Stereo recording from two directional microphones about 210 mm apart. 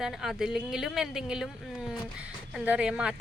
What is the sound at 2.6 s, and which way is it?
Speech, 5° right (ahead or behind).